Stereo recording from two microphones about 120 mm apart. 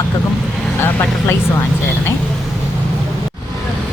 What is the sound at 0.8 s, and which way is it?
Speech, 20° left (ahead or behind).